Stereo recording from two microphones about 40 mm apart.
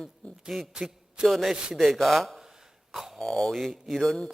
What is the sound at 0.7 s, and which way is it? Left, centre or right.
Speech, centre.